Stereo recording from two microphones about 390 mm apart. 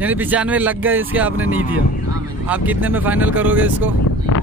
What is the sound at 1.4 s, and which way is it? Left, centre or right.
Speech, right.